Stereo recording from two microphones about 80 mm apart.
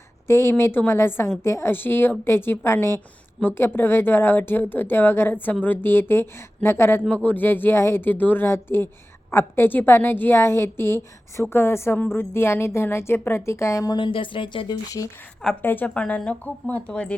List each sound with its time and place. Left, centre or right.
0.3 s a woman's voice: left
13.9 s speech: left
14.8 s a woman's voice: left
15.6 s speech: left